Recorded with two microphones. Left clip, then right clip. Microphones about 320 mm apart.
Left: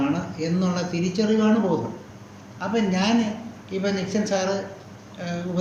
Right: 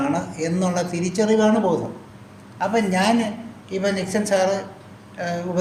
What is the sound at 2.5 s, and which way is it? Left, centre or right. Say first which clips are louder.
Speech: right 4 dB; right.